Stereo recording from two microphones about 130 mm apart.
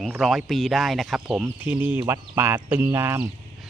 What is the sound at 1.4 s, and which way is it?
Speech, 10° right (ahead or behind).